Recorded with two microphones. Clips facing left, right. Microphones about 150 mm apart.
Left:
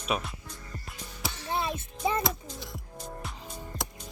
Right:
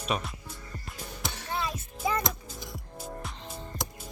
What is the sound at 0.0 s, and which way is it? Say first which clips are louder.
Speech: even; centre (ahead or behind).